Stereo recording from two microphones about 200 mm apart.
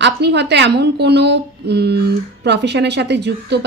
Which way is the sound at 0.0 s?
60° right (ahead or behind).